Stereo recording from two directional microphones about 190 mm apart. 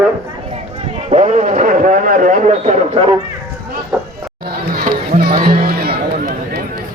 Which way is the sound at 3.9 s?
5° right (ahead or behind).